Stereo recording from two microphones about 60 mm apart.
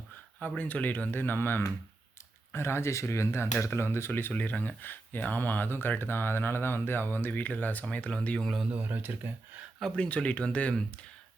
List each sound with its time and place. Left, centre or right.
0.4 s speech: left
8.4 s a man's voice: centre
8.7 s speech: right
9.8 s speech: centre